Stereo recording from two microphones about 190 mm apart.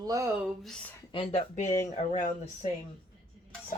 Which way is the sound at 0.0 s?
20° right (ahead or behind).